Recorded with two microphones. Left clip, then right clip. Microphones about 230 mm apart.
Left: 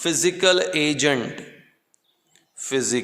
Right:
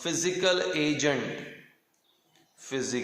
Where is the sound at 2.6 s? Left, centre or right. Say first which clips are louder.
Left 8 dB; left.